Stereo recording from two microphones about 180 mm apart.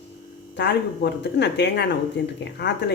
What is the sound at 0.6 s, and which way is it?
Speech, 70° left (ahead or behind).